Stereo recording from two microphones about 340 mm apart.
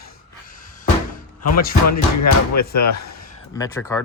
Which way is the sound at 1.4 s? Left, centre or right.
Left.